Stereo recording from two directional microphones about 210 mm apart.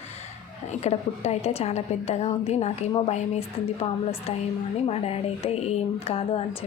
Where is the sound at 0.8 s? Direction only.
30° left (ahead or behind).